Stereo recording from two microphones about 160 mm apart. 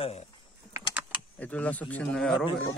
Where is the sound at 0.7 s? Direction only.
10° right (ahead or behind).